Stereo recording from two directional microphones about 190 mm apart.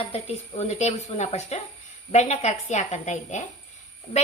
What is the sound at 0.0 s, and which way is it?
A woman's voice, 30° left (ahead or behind).